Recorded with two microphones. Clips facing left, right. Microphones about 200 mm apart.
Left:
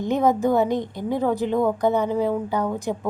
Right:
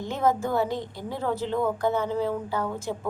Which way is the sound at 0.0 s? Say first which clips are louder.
Left 5 dB; 20° left (ahead or behind).